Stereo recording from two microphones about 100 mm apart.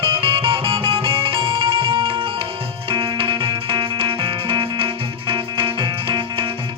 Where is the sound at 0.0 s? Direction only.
65° right (ahead or behind).